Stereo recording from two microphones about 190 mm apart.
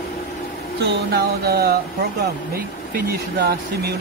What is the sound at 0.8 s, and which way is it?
Speech, 60° right (ahead or behind).